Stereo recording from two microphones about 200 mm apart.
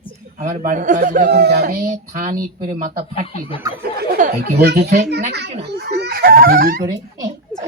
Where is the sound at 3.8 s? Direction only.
50° right (ahead or behind).